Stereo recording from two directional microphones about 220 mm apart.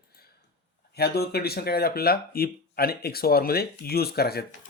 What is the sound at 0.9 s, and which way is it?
Speech, 45° left (ahead or behind).